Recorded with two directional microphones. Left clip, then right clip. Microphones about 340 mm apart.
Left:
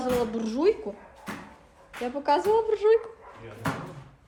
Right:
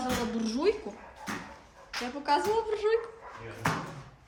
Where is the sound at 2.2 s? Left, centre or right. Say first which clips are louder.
Left 5 dB; centre.